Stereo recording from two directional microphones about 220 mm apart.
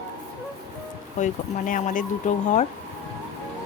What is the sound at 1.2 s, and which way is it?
Speech, 35° left (ahead or behind).